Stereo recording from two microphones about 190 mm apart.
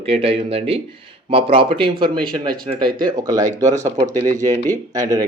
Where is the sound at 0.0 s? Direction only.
30° right (ahead or behind).